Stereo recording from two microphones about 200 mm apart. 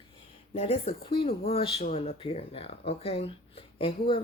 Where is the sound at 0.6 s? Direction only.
30° left (ahead or behind).